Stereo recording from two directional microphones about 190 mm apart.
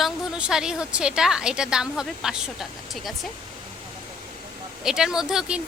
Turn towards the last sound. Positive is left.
turn(degrees=-5)  # may be behind; listen again after turning